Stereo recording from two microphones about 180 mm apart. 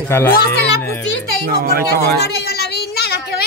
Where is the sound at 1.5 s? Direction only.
55° right (ahead or behind).